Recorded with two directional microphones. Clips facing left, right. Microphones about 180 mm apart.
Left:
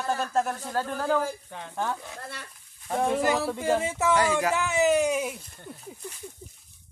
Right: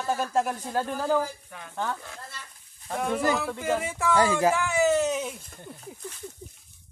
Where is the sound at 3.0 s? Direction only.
30° left (ahead or behind).